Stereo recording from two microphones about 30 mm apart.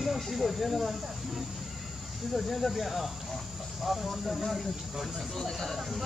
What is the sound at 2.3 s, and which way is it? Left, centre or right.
Speech, centre.